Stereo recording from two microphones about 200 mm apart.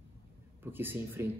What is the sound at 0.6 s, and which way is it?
Speech, 10° right (ahead or behind).